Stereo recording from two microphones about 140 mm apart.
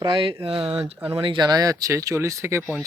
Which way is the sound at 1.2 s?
35° right (ahead or behind).